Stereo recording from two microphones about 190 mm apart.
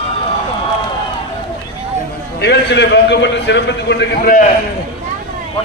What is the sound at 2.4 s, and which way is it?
A man's voice, 65° left (ahead or behind).